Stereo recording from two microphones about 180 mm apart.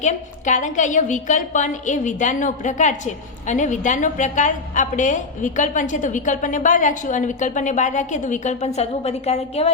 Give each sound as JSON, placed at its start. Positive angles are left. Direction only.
{"t": 0.0, "sound": "a woman's voice", "side_deg": 40}